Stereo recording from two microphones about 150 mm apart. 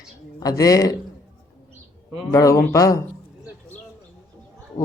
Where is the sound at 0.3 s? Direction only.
25° left (ahead or behind).